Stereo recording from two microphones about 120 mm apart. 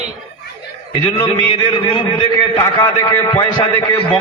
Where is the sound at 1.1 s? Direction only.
45° left (ahead or behind).